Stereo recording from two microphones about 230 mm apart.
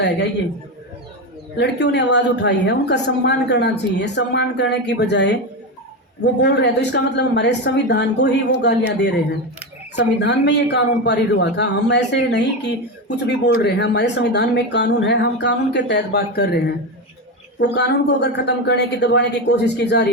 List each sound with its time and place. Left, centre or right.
1.5 s speech: left
6.4 s speech: left
9.9 s speech: left